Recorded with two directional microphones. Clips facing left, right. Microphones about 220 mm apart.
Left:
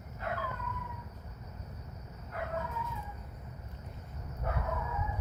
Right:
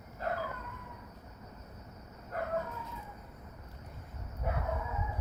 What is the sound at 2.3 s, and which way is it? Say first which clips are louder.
Bow-wow: right 2 dB; 45° right (ahead or behind).